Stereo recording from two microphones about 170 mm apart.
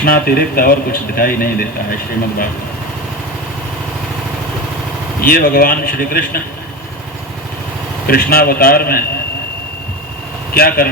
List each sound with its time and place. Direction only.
0.0 s a man's voice: 60° left (ahead or behind)
5.2 s a man's voice: 60° left (ahead or behind)
8.0 s a man's voice: 60° left (ahead or behind)
10.5 s a man's voice: 65° left (ahead or behind)